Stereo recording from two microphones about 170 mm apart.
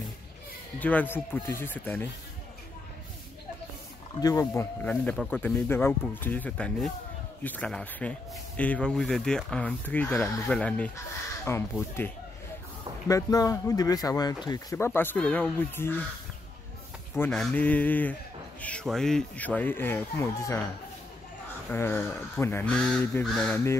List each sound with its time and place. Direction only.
0.7 s speech: 10° left (ahead or behind)
4.2 s speech: 20° left (ahead or behind)
13.1 s speech: 20° left (ahead or behind)
17.1 s speech: 10° left (ahead or behind)
21.6 s speech: 15° left (ahead or behind)